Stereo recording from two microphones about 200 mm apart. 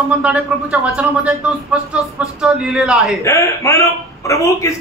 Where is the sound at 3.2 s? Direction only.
15° left (ahead or behind).